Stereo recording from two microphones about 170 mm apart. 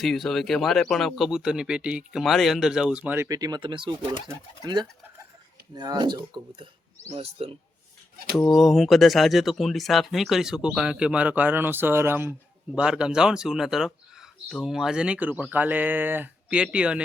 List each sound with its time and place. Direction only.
0.0 s a man's voice: centre (ahead or behind); by 7.5 s 35° right (ahead or behind)
8.4 s speech: centre (ahead or behind)